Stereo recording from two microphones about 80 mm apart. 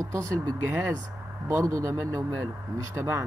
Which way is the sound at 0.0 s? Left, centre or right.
Right.